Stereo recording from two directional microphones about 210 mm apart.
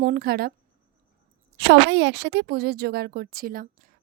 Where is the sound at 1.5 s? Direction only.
55° right (ahead or behind).